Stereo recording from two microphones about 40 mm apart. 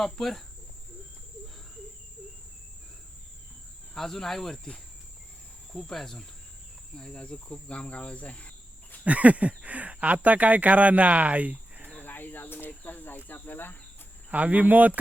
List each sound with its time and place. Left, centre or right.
0.0 s speech: centre
3.9 s speech: centre
5.7 s speech: centre
6.9 s cricket: centre
9.0 s speech: right
12.0 s speech: left
14.3 s speech: right